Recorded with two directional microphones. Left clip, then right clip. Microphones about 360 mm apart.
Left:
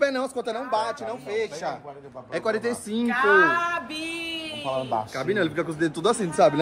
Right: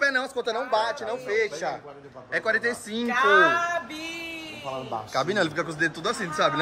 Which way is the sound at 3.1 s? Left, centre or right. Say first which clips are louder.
Even; centre.